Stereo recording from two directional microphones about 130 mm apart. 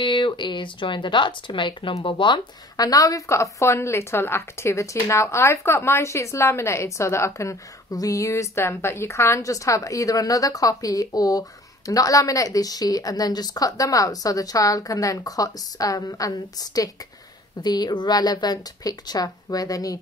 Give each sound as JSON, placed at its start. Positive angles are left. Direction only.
{"t": 0.0, "sound": "a woman's voice", "side_deg": 40}